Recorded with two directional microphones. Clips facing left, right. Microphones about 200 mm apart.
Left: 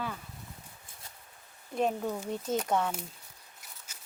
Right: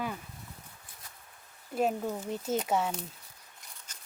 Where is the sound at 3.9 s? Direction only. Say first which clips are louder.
Even; 10° left (ahead or behind).